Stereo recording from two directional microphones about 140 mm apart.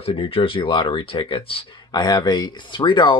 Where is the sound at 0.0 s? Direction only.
40° left (ahead or behind).